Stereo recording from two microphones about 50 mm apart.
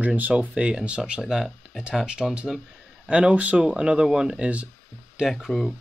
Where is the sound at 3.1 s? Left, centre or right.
Right.